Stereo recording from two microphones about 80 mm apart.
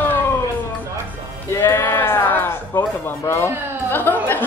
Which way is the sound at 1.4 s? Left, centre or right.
Left.